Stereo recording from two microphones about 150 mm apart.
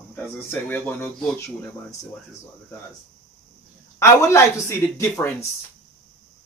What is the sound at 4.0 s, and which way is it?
Speech, 20° left (ahead or behind).